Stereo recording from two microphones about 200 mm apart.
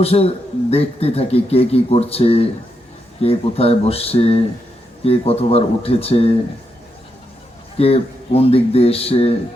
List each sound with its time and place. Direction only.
0.0 s speech: 30° left (ahead or behind)
7.8 s speech: 30° left (ahead or behind)